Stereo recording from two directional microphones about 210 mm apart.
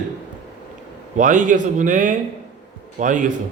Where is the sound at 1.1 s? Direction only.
35° right (ahead or behind).